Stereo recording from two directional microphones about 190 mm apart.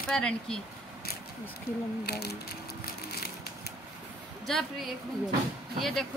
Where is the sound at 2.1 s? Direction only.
55° left (ahead or behind).